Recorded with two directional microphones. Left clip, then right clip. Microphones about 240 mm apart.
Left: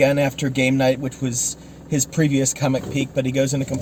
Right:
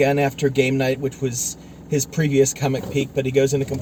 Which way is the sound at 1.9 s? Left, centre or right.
Centre.